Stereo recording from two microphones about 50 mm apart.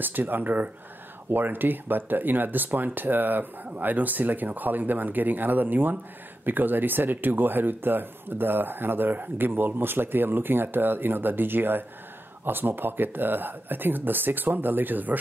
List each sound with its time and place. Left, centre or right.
0.0 s speech: right